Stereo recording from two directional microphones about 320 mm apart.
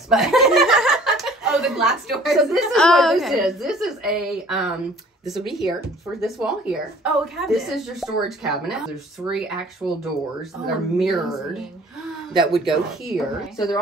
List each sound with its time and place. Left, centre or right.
0.1 s speech: centre
11.0 s speech: centre